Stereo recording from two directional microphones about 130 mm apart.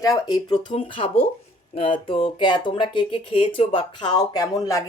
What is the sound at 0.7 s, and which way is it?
Speech, 45° left (ahead or behind).